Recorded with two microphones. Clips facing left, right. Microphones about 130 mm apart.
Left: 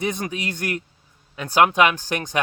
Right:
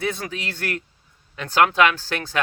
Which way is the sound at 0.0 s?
15° left (ahead or behind).